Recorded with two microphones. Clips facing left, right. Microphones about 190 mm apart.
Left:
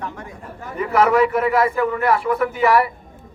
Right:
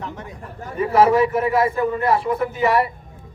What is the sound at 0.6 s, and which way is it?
A man's voice, 30° right (ahead or behind).